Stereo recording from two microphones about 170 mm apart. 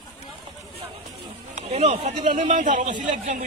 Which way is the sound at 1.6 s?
40° right (ahead or behind).